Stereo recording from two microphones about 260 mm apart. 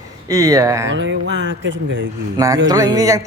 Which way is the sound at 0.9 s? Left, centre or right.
Right.